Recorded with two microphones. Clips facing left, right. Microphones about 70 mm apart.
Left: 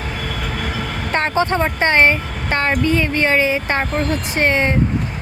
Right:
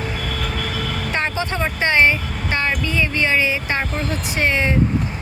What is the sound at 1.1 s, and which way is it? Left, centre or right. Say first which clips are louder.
Vehicle: left 7 dB; left.